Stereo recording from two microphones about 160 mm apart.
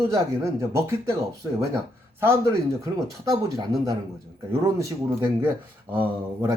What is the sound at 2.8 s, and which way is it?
A man's voice, 25° right (ahead or behind).